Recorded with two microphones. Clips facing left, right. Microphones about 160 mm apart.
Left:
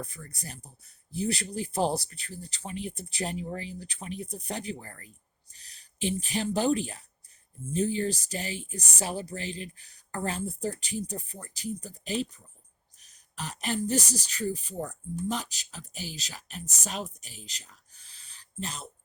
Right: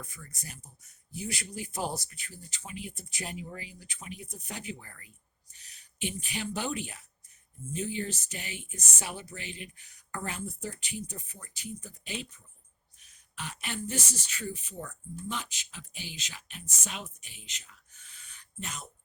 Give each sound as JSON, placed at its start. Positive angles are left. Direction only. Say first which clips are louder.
{"t": 0.0, "sound": "speech", "louder": "left 6 dB", "side_deg": 35}